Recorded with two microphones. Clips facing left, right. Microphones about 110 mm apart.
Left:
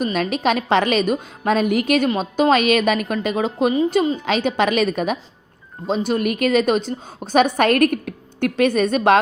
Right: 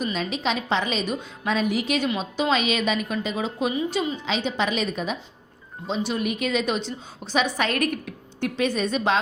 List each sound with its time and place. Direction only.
0.0 s a woman's voice: 55° left (ahead or behind)
5.9 s a woman's voice: 45° left (ahead or behind)